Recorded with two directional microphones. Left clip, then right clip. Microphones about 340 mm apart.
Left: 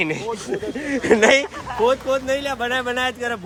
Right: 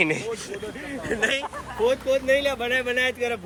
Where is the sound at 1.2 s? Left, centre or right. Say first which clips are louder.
Left 9 dB; centre.